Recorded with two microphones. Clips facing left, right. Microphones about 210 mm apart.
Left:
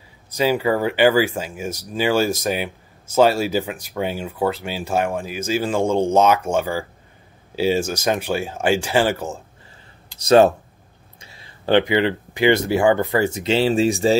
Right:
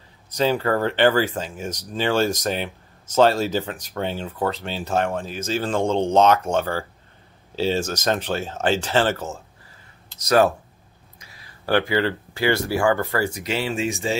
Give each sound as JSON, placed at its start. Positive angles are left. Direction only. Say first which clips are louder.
{"t": 0.3, "sound": "speech", "louder": "left 2 dB", "side_deg": 10}
{"t": 10.1, "sound": "speech", "louder": "left 5 dB", "side_deg": 25}